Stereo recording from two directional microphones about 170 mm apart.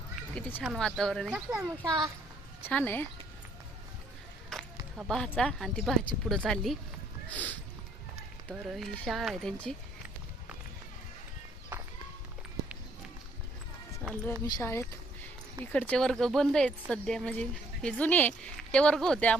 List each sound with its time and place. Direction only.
0.3 s speech: 10° left (ahead or behind)
0.6 s speech: centre (ahead or behind)
1.8 s a child's voice: 20° right (ahead or behind)
2.6 s speech: 10° left (ahead or behind)
4.5 s a sound: 5° left (ahead or behind)
4.9 s speech: centre (ahead or behind)
14.0 s a sound: 5° left (ahead or behind)
14.4 s speech: 15° left (ahead or behind)